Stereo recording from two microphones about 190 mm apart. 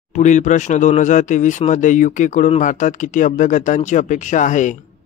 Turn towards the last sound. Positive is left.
turn(degrees=40)  # may be behind; listen again after turning